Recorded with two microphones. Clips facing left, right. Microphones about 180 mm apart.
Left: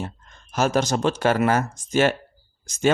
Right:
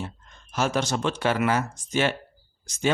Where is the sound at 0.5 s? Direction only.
40° left (ahead or behind).